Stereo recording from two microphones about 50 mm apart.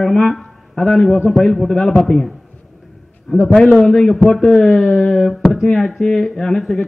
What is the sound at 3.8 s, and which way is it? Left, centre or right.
Speech, centre.